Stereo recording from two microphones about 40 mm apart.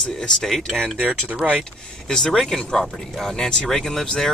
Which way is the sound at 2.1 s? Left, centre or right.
Centre.